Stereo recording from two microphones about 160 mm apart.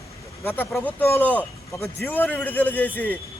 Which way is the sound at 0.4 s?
15° left (ahead or behind).